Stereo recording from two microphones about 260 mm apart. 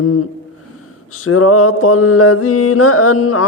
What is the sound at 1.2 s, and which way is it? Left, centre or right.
Mantra, left.